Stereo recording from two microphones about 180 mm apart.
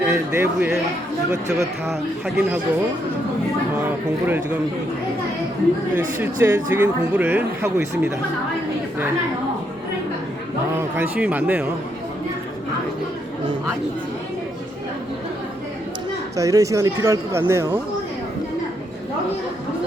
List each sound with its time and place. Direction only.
0.0 s speech: 10° right (ahead or behind)
3.8 s speech: 10° right (ahead or behind)
6.1 s speech: 15° right (ahead or behind)
10.8 s speech: 10° right (ahead or behind)
16.4 s speech: 20° right (ahead or behind)